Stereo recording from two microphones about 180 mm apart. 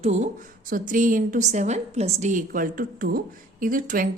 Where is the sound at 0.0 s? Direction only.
40° right (ahead or behind).